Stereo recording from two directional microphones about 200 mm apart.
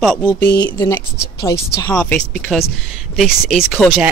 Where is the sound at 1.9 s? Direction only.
5° left (ahead or behind).